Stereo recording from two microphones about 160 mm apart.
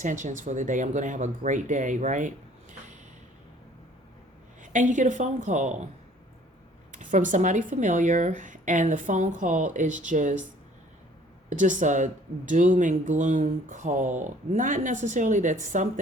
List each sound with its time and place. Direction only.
0.0 s speech: 50° right (ahead or behind)
4.6 s speech: 50° right (ahead or behind)
6.9 s speech: 50° right (ahead or behind)
11.4 s speech: 50° right (ahead or behind)